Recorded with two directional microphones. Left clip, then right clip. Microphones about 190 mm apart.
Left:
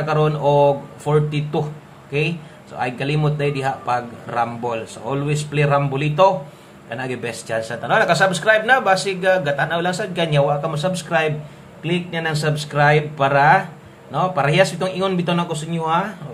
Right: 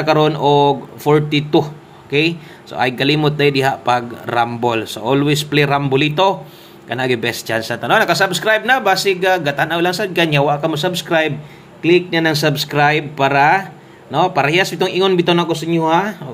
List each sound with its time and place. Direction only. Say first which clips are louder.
0.0 s speech: right 5 dB; 30° right (ahead or behind)